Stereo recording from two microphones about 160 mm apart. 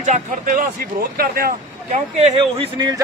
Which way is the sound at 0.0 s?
50° right (ahead or behind).